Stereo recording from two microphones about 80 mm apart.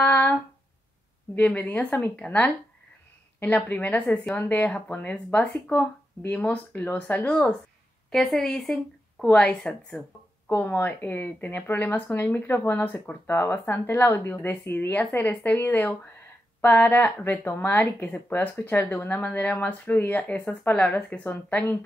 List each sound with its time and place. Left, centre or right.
0.0 s a sound: left
1.3 s a woman's voice: centre
10.5 s speech: left